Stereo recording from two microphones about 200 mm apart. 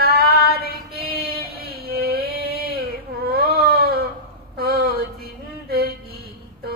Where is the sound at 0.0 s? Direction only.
50° right (ahead or behind).